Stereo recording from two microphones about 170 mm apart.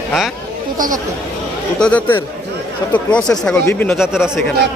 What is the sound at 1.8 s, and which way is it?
Speech, 5° left (ahead or behind).